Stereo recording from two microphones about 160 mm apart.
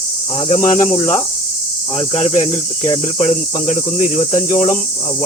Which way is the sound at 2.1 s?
45° left (ahead or behind).